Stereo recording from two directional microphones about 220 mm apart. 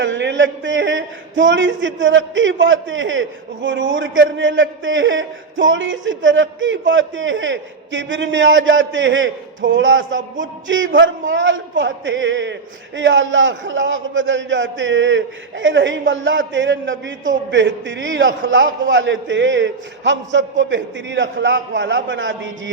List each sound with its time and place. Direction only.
0.0 s speech: 55° right (ahead or behind)